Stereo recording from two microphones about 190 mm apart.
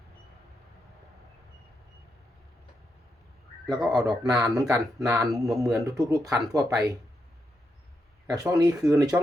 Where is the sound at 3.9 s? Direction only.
20° right (ahead or behind).